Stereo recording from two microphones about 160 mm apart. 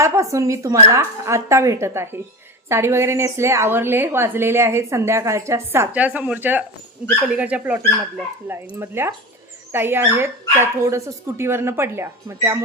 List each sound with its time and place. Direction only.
0.0 s a woman's voice: 20° right (ahead or behind)